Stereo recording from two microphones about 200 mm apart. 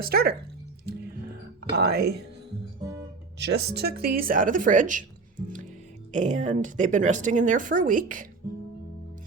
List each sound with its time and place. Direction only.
0.0 s speech: 50° right (ahead or behind)
1.7 s speech: 55° right (ahead or behind)
3.3 s speech: 60° right (ahead or behind); by 5.0 s 40° right (ahead or behind)
6.1 s speech: 35° right (ahead or behind)